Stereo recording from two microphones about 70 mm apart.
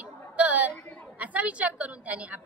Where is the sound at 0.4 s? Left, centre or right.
Right.